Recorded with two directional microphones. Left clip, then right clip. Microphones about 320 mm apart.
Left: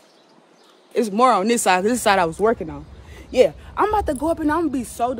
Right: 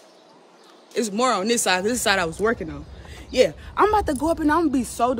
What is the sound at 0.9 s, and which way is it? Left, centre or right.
Speech, centre.